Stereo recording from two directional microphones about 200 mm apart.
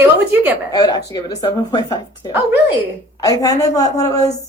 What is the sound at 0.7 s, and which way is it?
A woman's voice, 20° left (ahead or behind).